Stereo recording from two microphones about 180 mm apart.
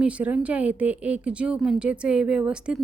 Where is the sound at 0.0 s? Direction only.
5° right (ahead or behind).